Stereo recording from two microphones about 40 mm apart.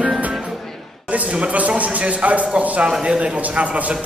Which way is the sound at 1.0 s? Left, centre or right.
Right.